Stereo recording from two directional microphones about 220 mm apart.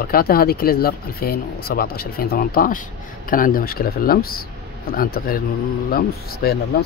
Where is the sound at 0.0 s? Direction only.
45° left (ahead or behind).